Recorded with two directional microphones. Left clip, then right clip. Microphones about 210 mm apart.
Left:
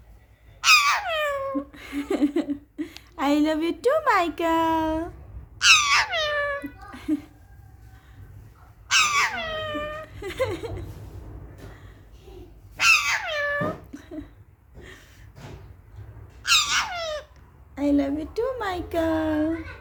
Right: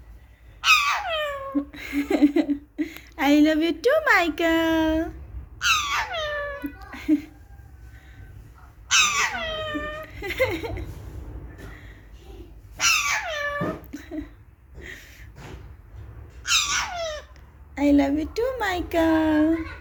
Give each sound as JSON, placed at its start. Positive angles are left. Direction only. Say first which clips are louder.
{"t": 0.6, "sound": "cat", "louder": "left 1 dB", "side_deg": 10}
{"t": 3.0, "sound": "speech", "louder": "right 3 dB", "side_deg": 20}
{"t": 5.5, "sound": "a sound", "louder": "left 5 dB", "side_deg": 15}
{"t": 8.9, "sound": "a sound", "louder": "even", "side_deg": 5}
{"t": 14.8, "sound": "snort", "louder": "right 6 dB", "side_deg": 10}
{"t": 16.4, "sound": "squeak", "louder": "left 2 dB", "side_deg": 5}
{"t": 17.7, "sound": "speech", "louder": "right 3 dB", "side_deg": 10}